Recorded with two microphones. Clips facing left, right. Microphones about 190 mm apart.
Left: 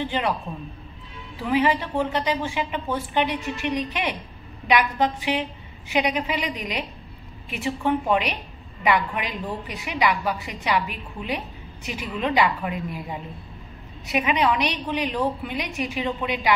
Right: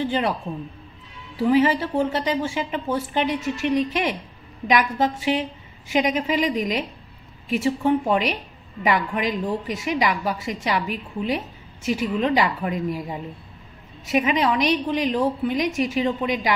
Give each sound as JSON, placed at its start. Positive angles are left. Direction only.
{"t": 1.5, "sound": "a woman's voice", "side_deg": -40}
{"t": 14.1, "sound": "a woman's voice", "side_deg": -40}